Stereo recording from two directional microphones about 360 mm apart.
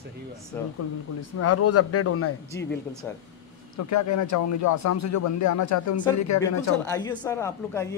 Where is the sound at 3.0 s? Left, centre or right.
Centre.